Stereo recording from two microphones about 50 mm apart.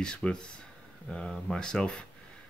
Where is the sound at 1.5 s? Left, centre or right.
Centre.